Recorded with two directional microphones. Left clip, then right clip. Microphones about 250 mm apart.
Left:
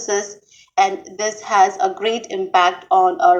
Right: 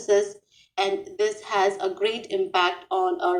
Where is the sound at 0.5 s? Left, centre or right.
Centre.